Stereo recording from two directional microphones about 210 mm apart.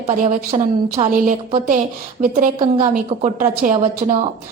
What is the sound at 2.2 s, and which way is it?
Speech, 30° right (ahead or behind).